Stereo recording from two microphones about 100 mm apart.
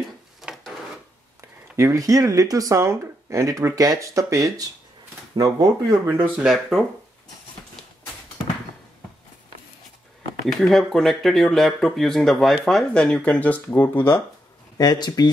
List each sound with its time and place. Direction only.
0.4 s wood: 5° right (ahead or behind)
1.8 s speech: 30° right (ahead or behind)
6.0 s speech: 20° right (ahead or behind)
6.3 s speech: 5° right (ahead or behind)
7.8 s a sound: 5° left (ahead or behind)
10.4 s speech: 5° left (ahead or behind); by 14.2 s 25° left (ahead or behind)
14.8 s speech: 45° left (ahead or behind)